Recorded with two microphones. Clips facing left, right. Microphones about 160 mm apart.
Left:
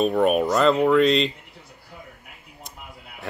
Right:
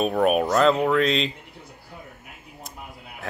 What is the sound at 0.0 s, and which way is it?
Speech, centre (ahead or behind).